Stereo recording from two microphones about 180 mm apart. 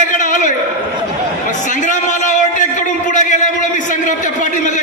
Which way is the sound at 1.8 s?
45° left (ahead or behind).